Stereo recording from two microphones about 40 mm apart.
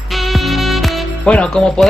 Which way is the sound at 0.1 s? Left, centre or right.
Centre.